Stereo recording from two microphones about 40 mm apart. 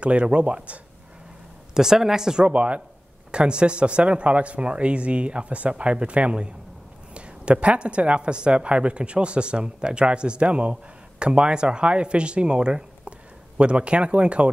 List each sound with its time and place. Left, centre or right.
0.0 s speech: right
1.7 s speech: centre
2.4 s speech: right